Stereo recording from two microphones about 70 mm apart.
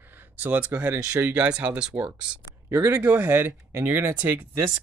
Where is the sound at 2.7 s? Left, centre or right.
Right.